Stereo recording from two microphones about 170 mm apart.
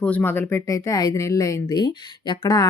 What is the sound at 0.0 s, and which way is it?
Speech, 10° left (ahead or behind).